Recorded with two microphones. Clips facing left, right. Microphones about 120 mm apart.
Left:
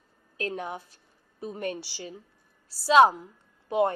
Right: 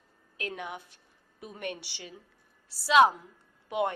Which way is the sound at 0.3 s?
35° left (ahead or behind).